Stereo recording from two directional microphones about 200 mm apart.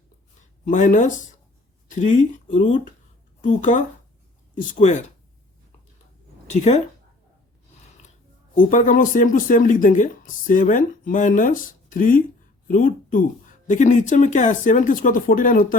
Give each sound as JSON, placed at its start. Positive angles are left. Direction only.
{"t": 0.6, "sound": "speech", "side_deg": 40}
{"t": 6.5, "sound": "speech", "side_deg": 35}
{"t": 8.5, "sound": "speech", "side_deg": 40}